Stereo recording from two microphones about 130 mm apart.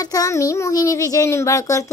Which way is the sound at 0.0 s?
25° left (ahead or behind).